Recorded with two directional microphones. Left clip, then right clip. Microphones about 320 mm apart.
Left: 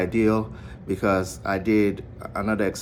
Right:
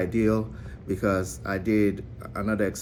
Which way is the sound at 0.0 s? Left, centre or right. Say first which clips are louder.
Left 3 dB; centre.